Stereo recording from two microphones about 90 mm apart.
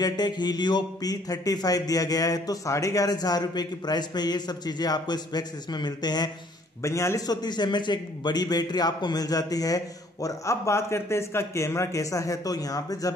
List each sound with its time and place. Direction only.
0.0 s speech: 50° left (ahead or behind)
6.8 s a man's voice: 35° left (ahead or behind)
7.2 s a man's voice: 50° left (ahead or behind)